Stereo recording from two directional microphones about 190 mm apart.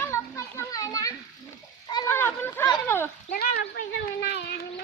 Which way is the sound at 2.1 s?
10° left (ahead or behind).